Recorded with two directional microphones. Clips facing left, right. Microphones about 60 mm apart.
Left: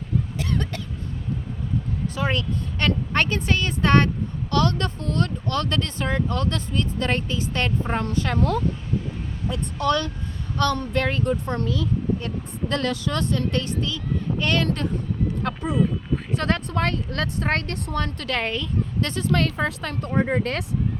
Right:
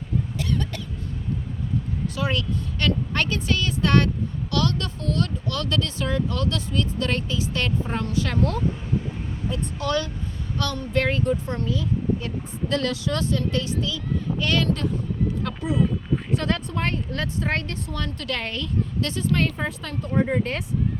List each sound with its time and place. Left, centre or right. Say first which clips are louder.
0.3 s cough: even; left
2.1 s speech: left 1 dB; left
9.5 s speech: left 3 dB; left
10.6 s speech: left 2 dB; left
18.3 s speech: left 8 dB; centre
19.2 s speech: left 2 dB; left
19.8 s speech: left 2 dB; left
20.1 s speech: even; left
20.4 s speech: left 1 dB; left